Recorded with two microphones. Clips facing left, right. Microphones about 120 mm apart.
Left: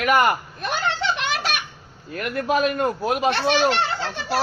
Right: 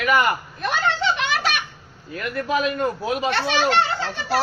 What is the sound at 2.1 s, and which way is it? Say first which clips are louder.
A man's voice: left 1 dB; 55° left (ahead or behind).